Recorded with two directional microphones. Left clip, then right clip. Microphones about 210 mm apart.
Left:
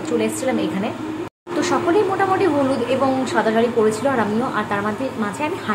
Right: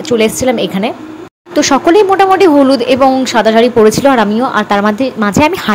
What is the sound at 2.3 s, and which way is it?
A woman's voice, 40° right (ahead or behind).